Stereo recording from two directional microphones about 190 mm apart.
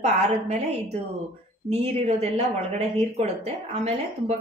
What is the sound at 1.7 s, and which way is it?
Speech, 35° right (ahead or behind).